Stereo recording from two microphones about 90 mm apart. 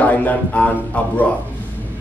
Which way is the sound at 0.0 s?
15° left (ahead or behind).